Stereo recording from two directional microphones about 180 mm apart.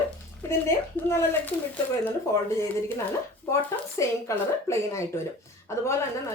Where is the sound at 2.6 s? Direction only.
15° left (ahead or behind).